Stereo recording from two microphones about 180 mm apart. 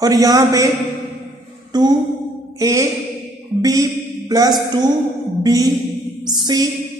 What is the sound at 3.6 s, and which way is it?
Music, 20° right (ahead or behind).